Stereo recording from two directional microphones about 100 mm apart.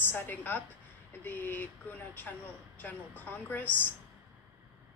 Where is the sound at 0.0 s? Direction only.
20° left (ahead or behind).